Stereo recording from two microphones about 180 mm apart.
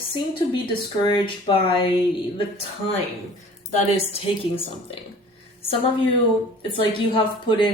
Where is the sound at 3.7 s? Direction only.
35° left (ahead or behind).